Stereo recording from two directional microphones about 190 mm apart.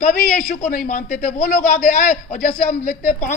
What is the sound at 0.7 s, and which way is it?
Speech, 45° left (ahead or behind).